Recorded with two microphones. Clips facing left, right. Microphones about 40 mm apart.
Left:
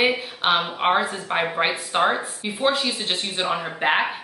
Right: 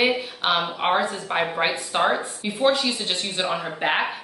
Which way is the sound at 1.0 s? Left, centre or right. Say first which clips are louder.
Even; left.